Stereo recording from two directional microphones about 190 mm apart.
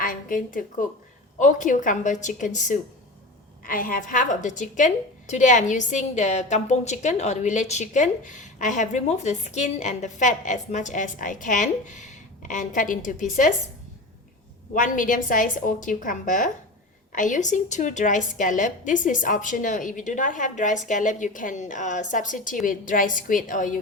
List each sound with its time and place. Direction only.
0.0 s a woman's voice: 45° left (ahead or behind)
14.7 s a woman's voice: 45° left (ahead or behind)